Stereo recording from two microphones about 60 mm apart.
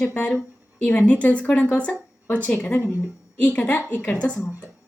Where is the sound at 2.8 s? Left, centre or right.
Left.